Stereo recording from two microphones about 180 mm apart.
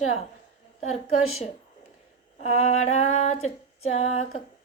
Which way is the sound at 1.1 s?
35° left (ahead or behind).